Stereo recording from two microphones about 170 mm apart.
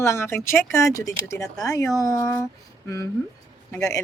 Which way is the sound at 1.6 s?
20° left (ahead or behind).